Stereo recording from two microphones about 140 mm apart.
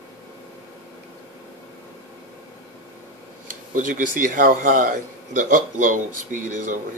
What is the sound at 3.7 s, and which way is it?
Speech, 70° right (ahead or behind).